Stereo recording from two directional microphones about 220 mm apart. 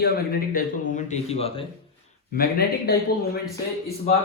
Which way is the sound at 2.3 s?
40° left (ahead or behind).